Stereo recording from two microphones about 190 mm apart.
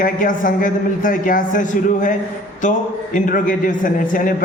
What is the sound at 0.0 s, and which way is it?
A man's voice, 45° left (ahead or behind).